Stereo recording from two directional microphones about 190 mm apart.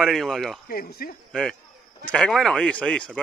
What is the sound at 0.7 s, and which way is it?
Speech, 55° left (ahead or behind).